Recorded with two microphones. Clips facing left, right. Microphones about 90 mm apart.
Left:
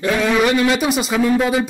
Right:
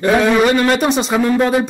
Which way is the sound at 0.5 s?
45° right (ahead or behind).